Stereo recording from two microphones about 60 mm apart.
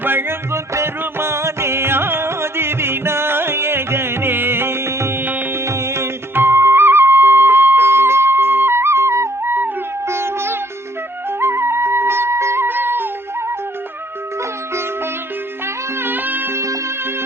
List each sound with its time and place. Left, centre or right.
0.0 s music: right
0.5 s music: right
5.2 s music: right
5.5 s music: right
12.6 s music: right
15.6 s music: right